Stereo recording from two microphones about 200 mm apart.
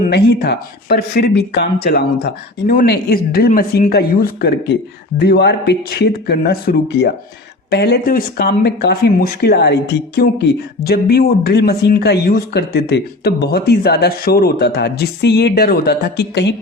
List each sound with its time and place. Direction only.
0.1 s speech: 55° left (ahead or behind)